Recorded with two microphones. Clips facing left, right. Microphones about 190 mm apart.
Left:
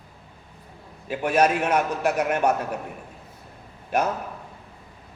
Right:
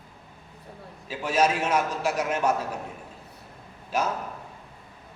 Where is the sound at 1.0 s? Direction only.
60° left (ahead or behind).